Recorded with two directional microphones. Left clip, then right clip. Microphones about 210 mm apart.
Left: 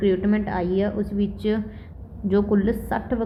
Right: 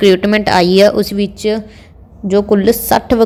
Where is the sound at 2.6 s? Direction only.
40° right (ahead or behind).